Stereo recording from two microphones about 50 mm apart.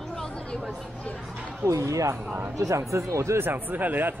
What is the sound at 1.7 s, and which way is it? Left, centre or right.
Speech, right.